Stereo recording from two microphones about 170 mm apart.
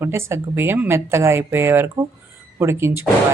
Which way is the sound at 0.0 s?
15° right (ahead or behind).